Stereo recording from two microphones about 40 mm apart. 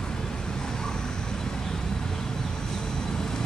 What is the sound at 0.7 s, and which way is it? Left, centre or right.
Vehicle, centre.